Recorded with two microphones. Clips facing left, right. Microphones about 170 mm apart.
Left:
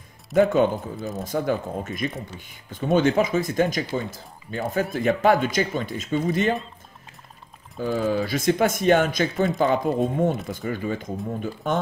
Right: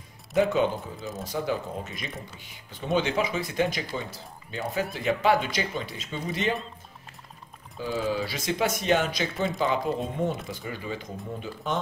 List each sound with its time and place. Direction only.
0.4 s speech: 50° left (ahead or behind)
7.7 s speech: 45° left (ahead or behind)